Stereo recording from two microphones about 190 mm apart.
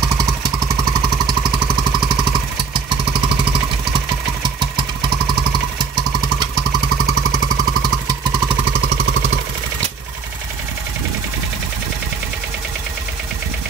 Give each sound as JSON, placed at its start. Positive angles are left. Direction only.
{"t": 1.9, "sound": "vehicle", "side_deg": -25}
{"t": 3.9, "sound": "vehicle", "side_deg": -25}